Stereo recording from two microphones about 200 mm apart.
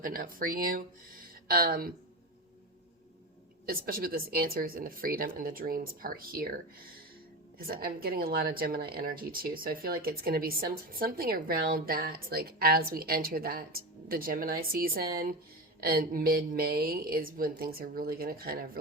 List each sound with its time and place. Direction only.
0.0 s speech: 45° right (ahead or behind)
3.7 s speech: 45° right (ahead or behind)
7.7 s speech: 50° right (ahead or behind)